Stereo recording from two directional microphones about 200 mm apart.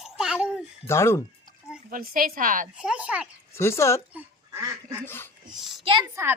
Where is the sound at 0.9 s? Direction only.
15° left (ahead or behind).